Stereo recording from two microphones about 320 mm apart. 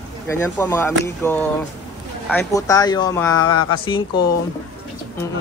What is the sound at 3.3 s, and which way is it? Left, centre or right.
Speech, left.